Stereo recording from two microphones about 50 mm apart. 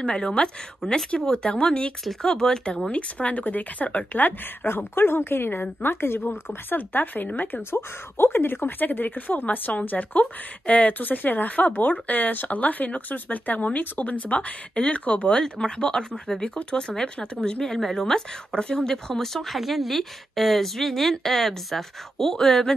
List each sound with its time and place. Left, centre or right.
0.0 s speech: centre
4.6 s speech: left
15.4 s speech: centre